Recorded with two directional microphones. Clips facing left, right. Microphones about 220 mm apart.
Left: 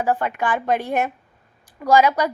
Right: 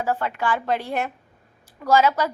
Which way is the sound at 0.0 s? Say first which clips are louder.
Left 3 dB; 15° left (ahead or behind).